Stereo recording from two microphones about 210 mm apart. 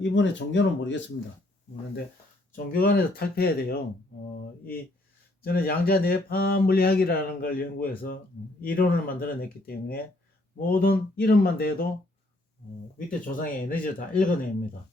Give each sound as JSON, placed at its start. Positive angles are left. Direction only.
{"t": 0.0, "sound": "speech", "side_deg": 60}
{"t": 2.7, "sound": "speech", "side_deg": 45}
{"t": 5.4, "sound": "speech", "side_deg": 45}
{"t": 13.1, "sound": "speech", "side_deg": 40}